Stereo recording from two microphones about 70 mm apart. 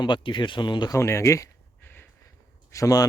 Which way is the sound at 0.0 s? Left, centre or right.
Left.